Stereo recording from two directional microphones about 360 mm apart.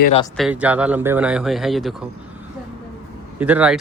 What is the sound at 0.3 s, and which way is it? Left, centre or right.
A man's voice, centre.